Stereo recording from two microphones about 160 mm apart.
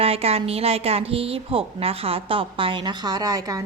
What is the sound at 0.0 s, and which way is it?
A woman's voice, 40° right (ahead or behind).